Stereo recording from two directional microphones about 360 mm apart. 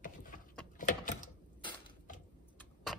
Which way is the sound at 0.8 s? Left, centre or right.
Left.